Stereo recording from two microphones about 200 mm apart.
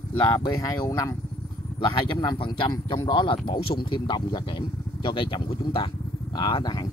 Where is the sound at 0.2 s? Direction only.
20° left (ahead or behind).